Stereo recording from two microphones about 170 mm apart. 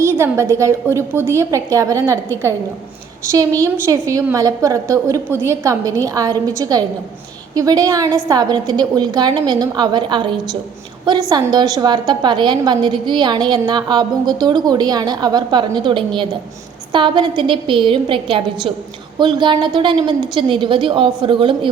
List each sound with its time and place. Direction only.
0.0 s a woman's voice: 15° right (ahead or behind)